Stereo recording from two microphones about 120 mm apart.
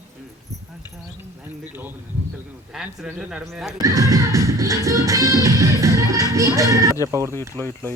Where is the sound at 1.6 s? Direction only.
15° right (ahead or behind).